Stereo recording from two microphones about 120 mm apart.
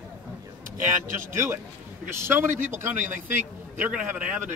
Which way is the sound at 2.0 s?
20° right (ahead or behind).